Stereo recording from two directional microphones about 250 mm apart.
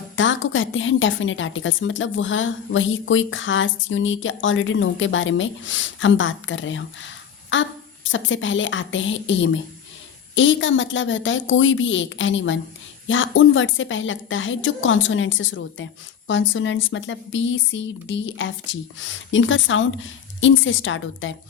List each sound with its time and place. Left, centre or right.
0.2 s a woman's voice: left